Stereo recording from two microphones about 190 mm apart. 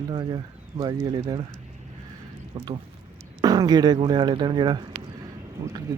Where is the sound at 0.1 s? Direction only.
25° right (ahead or behind).